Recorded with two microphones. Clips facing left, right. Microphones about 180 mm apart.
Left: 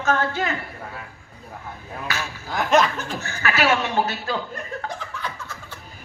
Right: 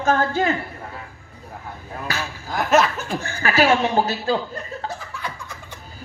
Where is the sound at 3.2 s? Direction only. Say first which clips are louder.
Right 4 dB; 30° right (ahead or behind).